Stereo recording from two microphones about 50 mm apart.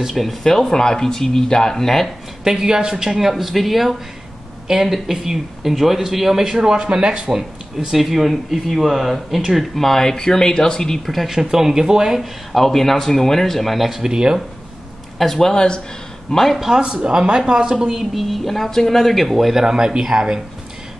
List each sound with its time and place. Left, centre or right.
0.0 s speech: centre
2.4 s speech: centre
7.9 s speech: centre
9.8 s speech: centre
11.1 s speech: centre
12.2 s speech: centre
15.1 s speech: centre
16.3 s speech: centre
16.5 s speech: centre
16.8 s speech: centre
17.9 s speech: centre